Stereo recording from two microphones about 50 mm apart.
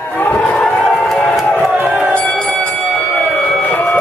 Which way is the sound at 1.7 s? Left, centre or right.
Right.